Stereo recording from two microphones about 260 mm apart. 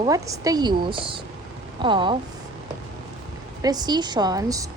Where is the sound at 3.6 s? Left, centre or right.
Centre.